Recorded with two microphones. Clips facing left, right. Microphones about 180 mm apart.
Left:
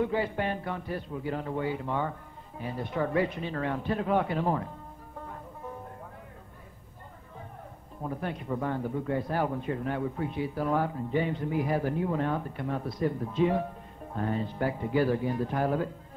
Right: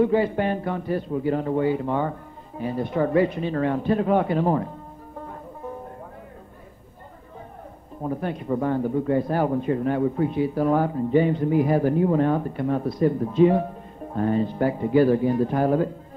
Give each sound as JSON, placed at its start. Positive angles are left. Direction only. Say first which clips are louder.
{"t": 0.0, "sound": "speech", "louder": "right 8 dB", "side_deg": -50}
{"t": 8.0, "sound": "speech", "louder": "right 7 dB", "side_deg": -40}